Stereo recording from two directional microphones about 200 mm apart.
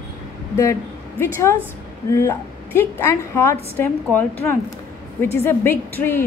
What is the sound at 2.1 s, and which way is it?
A woman's voice, 15° left (ahead or behind).